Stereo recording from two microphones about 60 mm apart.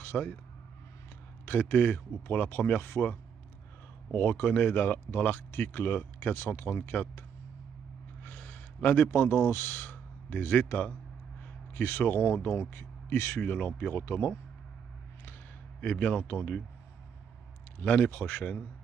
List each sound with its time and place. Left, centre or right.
0.0 s speech: left
1.4 s speech: left
12.6 s speech: left
13.4 s speech: left
15.8 s speech: left
17.7 s speech: left